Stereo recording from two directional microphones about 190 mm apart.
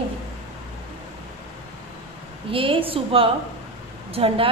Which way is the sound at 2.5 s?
30° right (ahead or behind).